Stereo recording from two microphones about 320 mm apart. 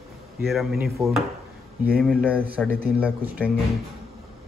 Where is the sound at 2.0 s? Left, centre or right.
Centre.